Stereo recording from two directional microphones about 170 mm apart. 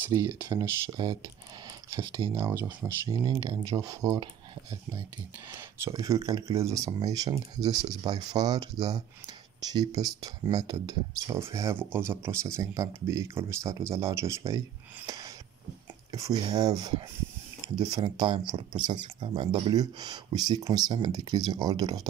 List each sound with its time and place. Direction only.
0.0 s speech: 15° right (ahead or behind)